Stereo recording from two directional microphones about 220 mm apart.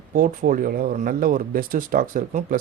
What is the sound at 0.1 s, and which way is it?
Speech, 40° right (ahead or behind).